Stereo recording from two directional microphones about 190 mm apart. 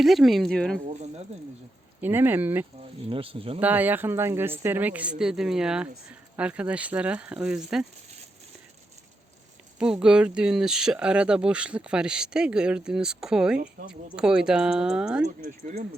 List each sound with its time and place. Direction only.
0.0 s speech: centre (ahead or behind)
0.9 s speech: 35° right (ahead or behind)
2.0 s a woman's voice: 10° right (ahead or behind)
3.1 s speech: 30° right (ahead or behind)
3.6 s a woman's voice: 10° right (ahead or behind)
9.7 s speech: 5° right (ahead or behind)
15.4 s speech: 45° right (ahead or behind)